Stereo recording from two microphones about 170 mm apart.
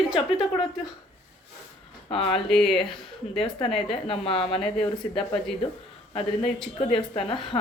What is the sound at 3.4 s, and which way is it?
Speech, 35° left (ahead or behind).